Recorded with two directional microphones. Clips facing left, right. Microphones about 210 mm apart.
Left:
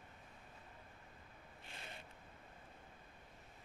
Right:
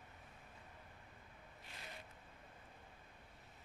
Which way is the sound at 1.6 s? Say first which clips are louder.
Left 1 dB; 25° left (ahead or behind).